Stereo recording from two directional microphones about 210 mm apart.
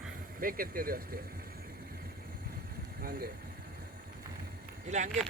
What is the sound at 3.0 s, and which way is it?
Speech, 45° right (ahead or behind).